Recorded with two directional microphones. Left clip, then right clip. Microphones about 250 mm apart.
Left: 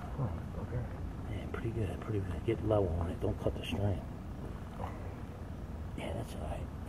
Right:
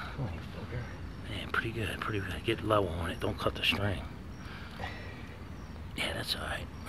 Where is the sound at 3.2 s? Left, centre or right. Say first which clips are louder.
Right 6 dB; right.